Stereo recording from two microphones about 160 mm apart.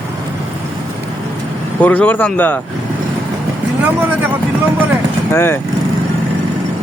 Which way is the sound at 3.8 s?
10° right (ahead or behind).